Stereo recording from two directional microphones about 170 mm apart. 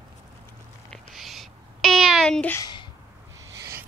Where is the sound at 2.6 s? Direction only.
25° left (ahead or behind).